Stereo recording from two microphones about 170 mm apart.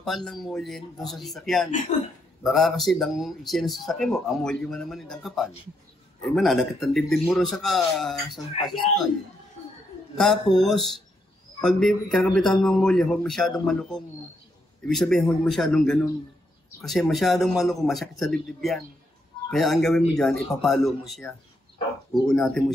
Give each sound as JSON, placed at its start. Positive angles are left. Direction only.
{"t": 0.0, "sound": "a man's voice", "side_deg": 5}
{"t": 1.9, "sound": "speech", "side_deg": 45}
{"t": 2.4, "sound": "a man's voice", "side_deg": 0}
{"t": 10.1, "sound": "a man's voice", "side_deg": 0}